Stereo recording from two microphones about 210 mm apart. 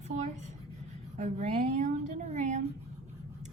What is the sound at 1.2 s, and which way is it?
A woman's voice, 35° right (ahead or behind).